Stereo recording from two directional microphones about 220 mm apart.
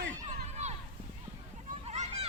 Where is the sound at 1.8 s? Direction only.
30° right (ahead or behind).